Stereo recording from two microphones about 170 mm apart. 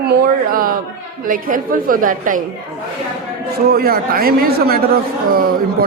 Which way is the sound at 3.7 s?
60° right (ahead or behind).